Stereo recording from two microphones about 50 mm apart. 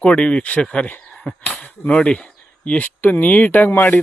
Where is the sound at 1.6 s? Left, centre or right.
Left.